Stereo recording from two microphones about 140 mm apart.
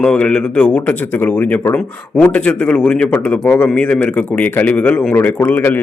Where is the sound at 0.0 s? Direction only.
5° left (ahead or behind).